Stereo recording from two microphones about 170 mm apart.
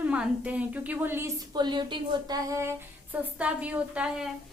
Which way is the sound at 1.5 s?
25° right (ahead or behind).